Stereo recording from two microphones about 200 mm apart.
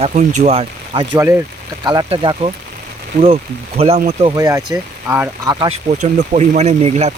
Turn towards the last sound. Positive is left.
turn(degrees=-35)  # may be behind; listen again after turning